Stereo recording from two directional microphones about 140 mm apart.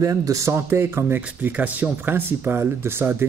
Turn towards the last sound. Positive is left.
turn(degrees=-15)  # may be behind; listen again after turning